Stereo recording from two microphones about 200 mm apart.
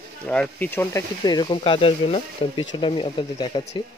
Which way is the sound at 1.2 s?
20° left (ahead or behind).